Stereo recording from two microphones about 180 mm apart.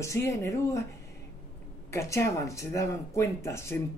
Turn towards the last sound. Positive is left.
turn(degrees=15)  # may be behind; listen again after turning